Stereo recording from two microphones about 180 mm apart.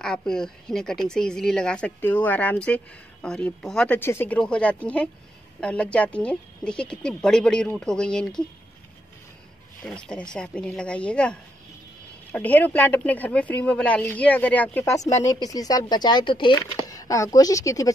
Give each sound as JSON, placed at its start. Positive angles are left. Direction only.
{"t": 0.0, "sound": "speech", "side_deg": 5}
{"t": 9.8, "sound": "speech", "side_deg": 5}